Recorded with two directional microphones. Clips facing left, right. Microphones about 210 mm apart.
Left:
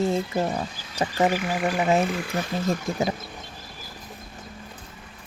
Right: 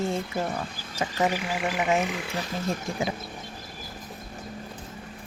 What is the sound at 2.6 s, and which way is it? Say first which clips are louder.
Speech: left 3 dB; 40° left (ahead or behind).